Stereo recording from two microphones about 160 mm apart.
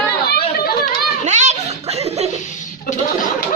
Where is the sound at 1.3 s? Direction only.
45° right (ahead or behind).